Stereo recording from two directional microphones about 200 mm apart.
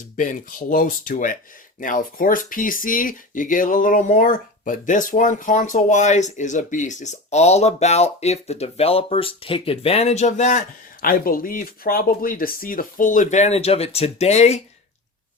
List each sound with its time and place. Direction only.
0.2 s speech: 40° left (ahead or behind)